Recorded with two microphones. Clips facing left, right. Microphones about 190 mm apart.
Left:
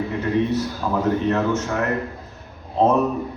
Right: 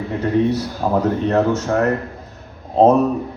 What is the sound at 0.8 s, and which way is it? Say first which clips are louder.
A man's voice: right 4 dB; 40° right (ahead or behind).